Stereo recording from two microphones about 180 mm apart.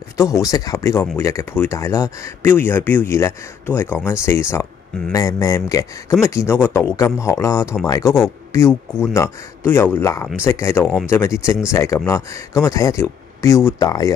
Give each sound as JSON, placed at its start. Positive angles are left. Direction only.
{"t": 0.2, "sound": "speech", "side_deg": 20}